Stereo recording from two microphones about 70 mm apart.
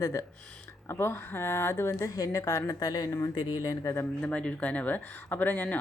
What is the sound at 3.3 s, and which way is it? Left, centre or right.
Speech, left.